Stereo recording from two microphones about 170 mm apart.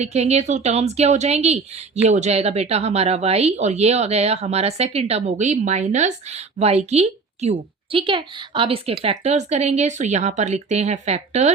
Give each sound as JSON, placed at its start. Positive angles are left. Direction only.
{"t": 0.0, "sound": "speech", "side_deg": -40}